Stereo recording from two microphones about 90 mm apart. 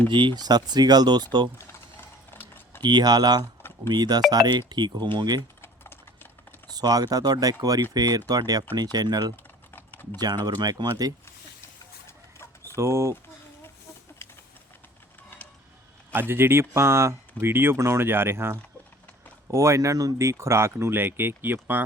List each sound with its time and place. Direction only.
0.1 s speech: 65° right (ahead or behind)
1.5 s typing: 25° left (ahead or behind)
2.8 s speech: 50° right (ahead or behind)
5.4 s typing: 25° left (ahead or behind)
6.7 s speech: 45° right (ahead or behind)
9.3 s typing: 20° left (ahead or behind)
10.2 s speech: 50° right (ahead or behind)
12.7 s speech: 30° right (ahead or behind)
16.1 s speech: 25° right (ahead or behind)